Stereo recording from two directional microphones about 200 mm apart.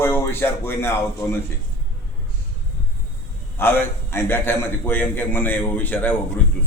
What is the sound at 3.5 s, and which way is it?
A man's voice, 10° left (ahead or behind).